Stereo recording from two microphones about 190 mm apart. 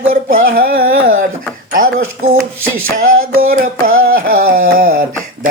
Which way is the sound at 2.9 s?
45° right (ahead or behind).